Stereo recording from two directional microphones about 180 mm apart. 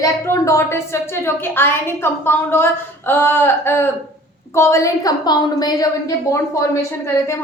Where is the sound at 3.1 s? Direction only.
10° left (ahead or behind).